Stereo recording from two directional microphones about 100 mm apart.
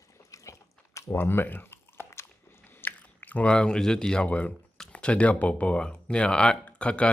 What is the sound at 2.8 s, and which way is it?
Speech, 15° left (ahead or behind).